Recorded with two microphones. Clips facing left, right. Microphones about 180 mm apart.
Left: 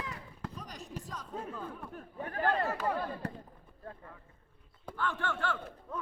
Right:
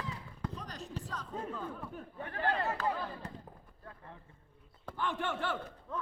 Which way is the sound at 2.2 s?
45° left (ahead or behind).